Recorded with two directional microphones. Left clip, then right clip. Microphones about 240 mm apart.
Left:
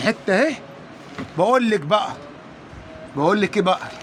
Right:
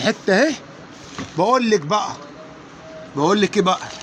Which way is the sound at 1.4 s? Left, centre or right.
Centre.